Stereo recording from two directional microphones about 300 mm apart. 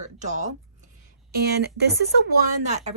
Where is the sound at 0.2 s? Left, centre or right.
Right.